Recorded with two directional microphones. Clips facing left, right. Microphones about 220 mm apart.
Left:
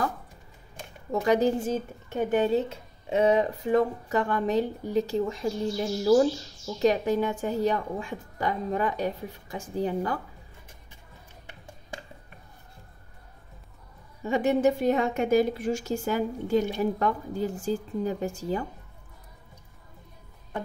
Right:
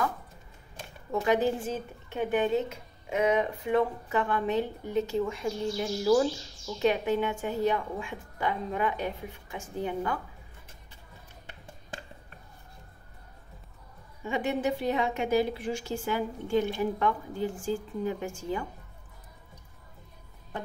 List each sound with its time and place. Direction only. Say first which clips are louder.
1.2 s a woman's voice: left 3 dB; 40° left (ahead or behind)
14.2 s a woman's voice: left 6 dB; 40° left (ahead or behind)